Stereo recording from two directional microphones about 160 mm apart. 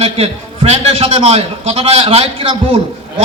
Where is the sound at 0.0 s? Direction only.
40° right (ahead or behind).